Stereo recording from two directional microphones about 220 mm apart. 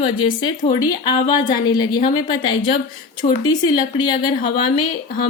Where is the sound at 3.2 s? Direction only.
30° left (ahead or behind).